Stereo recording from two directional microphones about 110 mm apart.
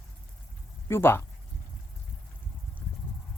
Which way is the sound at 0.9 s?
20° left (ahead or behind).